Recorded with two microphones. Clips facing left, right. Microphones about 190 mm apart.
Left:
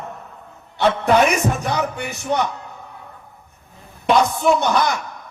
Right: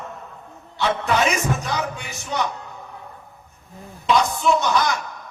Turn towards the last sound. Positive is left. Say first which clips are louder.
# left 2 dB
turn(degrees=55)  # may be behind; listen again after turning